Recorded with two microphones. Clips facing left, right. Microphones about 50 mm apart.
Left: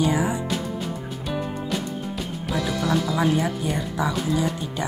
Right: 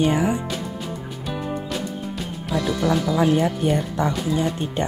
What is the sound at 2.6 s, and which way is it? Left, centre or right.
Music, centre.